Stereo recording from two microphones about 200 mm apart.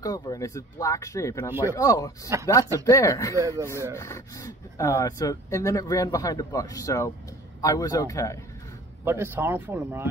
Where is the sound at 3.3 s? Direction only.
15° right (ahead or behind).